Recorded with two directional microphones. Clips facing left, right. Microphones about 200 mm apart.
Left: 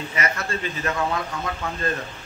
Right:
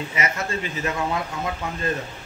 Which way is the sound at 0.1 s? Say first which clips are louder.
Left 1 dB; 20° right (ahead or behind).